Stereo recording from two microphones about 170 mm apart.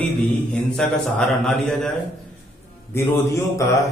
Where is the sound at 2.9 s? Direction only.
15° left (ahead or behind).